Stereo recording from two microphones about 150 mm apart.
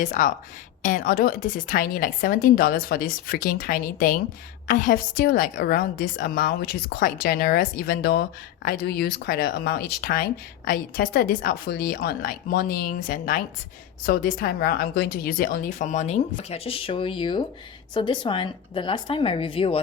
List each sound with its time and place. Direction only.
0.0 s a woman's voice: 60° left (ahead or behind); by 10.2 s 90° left
10.7 s a woman's voice: 80° left; by 19.8 s 40° left (ahead or behind)